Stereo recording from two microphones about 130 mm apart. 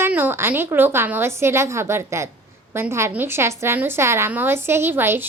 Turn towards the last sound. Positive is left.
turn(degrees=-15)  # may be behind; listen again after turning